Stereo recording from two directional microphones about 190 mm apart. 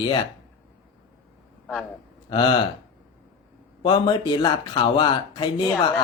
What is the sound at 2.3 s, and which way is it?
Speech, 25° left (ahead or behind).